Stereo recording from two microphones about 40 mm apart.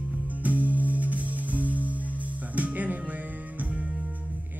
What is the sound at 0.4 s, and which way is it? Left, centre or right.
Music, right.